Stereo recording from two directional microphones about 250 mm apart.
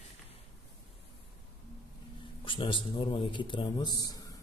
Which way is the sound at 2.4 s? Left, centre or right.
Centre.